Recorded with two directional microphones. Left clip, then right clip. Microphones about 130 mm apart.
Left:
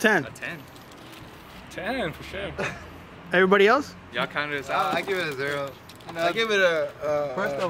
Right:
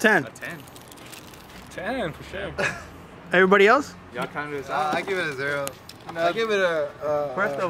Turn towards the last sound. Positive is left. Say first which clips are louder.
# right 1 dB
turn(degrees=5)  # may be behind; listen again after turning